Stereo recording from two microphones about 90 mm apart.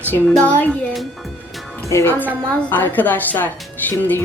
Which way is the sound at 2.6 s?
20° left (ahead or behind).